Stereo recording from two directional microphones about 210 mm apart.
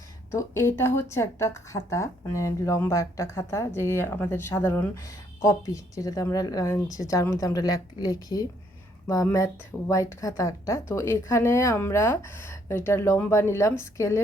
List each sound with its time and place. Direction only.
0.3 s a woman's voice: 15° left (ahead or behind)